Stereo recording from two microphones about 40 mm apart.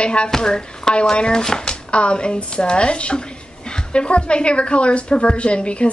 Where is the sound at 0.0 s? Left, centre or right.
Left.